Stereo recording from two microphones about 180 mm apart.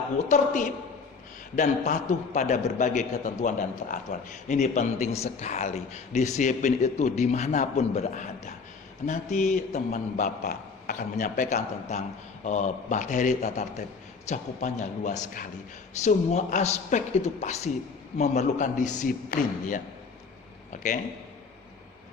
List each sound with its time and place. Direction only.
0.3 s a man's voice: 50° left (ahead or behind)